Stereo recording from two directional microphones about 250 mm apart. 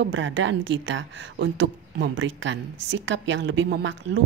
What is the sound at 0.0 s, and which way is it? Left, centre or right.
Speech, right.